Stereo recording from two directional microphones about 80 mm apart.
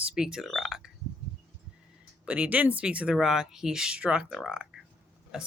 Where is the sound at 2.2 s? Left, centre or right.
Centre.